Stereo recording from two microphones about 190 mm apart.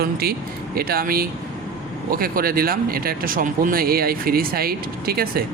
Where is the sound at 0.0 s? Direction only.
55° right (ahead or behind).